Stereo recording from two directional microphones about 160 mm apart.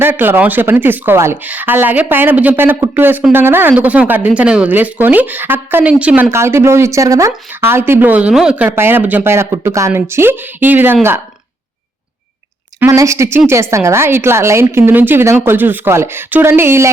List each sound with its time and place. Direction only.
0.0 s speech: 15° right (ahead or behind)
12.8 s speech: 15° right (ahead or behind)